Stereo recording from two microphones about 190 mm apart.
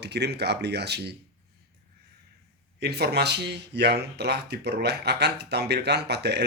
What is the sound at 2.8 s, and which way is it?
Speech, 60° right (ahead or behind).